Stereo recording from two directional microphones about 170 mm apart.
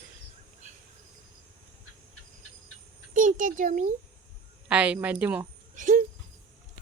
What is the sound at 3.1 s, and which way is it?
Speech, 50° right (ahead or behind).